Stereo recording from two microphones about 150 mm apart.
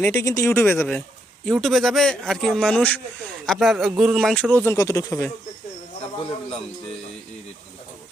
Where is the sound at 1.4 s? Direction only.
Centre (ahead or behind).